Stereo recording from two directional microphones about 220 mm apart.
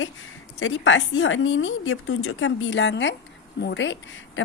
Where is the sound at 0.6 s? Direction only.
60° left (ahead or behind).